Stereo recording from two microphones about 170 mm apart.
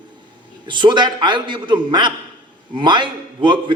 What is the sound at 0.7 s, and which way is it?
A man's voice, 25° right (ahead or behind).